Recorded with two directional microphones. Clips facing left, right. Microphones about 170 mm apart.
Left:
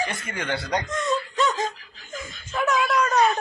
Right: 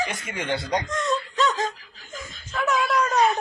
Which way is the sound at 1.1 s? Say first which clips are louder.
Even; 5° left (ahead or behind).